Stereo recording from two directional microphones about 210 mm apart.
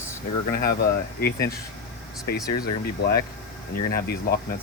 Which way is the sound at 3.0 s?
50° left (ahead or behind).